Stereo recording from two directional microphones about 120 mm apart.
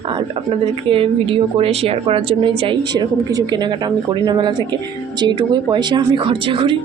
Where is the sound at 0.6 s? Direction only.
50° right (ahead or behind).